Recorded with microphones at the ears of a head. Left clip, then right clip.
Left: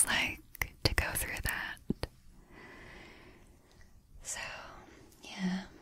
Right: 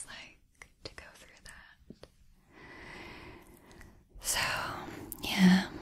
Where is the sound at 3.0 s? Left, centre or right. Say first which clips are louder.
Right 6 dB; right.